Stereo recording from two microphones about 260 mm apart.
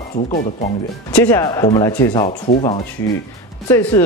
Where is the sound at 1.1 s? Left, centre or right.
Centre.